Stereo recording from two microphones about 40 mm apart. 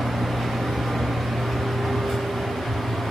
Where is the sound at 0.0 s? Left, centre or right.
Centre.